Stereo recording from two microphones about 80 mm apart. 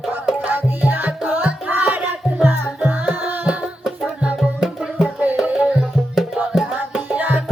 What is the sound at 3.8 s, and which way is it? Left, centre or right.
Music, centre.